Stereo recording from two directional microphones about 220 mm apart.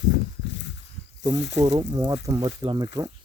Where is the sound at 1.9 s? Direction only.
20° right (ahead or behind).